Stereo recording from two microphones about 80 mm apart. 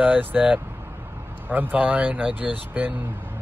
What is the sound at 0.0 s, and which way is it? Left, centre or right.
A man's voice, centre.